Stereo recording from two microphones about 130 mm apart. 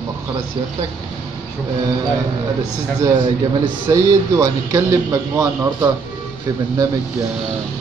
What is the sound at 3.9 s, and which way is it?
A man's voice, 25° right (ahead or behind).